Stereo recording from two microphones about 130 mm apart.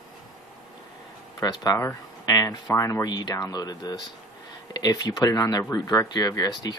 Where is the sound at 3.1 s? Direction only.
35° left (ahead or behind).